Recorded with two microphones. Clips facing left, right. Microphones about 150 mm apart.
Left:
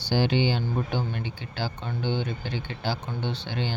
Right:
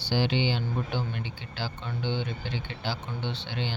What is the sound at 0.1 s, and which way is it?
Speech, 45° left (ahead or behind).